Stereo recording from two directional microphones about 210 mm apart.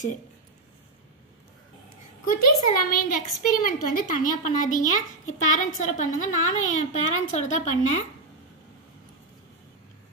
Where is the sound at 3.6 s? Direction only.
40° left (ahead or behind).